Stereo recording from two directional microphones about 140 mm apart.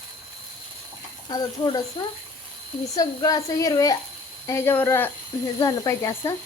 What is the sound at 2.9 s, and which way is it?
Speech, 25° left (ahead or behind).